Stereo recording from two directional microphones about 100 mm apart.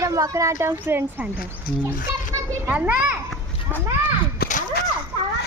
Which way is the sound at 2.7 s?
15° right (ahead or behind).